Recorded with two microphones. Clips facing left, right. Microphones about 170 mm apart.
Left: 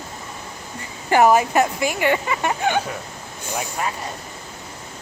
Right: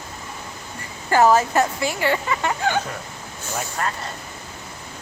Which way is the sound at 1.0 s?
15° left (ahead or behind).